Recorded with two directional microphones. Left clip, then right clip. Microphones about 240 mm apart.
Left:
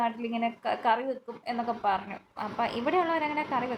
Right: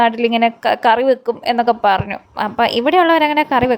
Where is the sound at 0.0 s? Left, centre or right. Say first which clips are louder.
Right 16 dB; right.